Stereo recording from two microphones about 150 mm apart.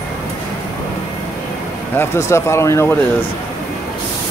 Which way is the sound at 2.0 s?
15° left (ahead or behind).